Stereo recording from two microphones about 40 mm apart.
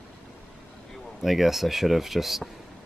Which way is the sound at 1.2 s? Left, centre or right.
Centre.